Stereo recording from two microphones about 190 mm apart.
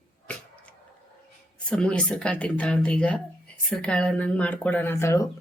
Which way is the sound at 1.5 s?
5° left (ahead or behind).